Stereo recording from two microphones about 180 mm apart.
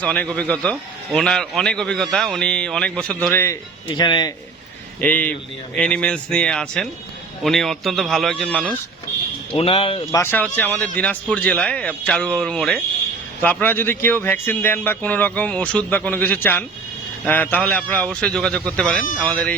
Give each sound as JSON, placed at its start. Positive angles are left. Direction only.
{"t": 0.0, "sound": "a man's voice", "side_deg": 10}
{"t": 4.9, "sound": "a man's voice", "side_deg": 10}
{"t": 9.5, "sound": "speech", "side_deg": 35}
{"t": 10.1, "sound": "a man's voice", "side_deg": 15}